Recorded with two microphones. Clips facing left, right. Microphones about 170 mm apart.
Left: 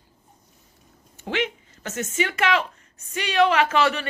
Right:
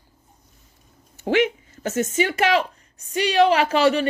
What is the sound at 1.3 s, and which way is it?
Speech, 40° right (ahead or behind).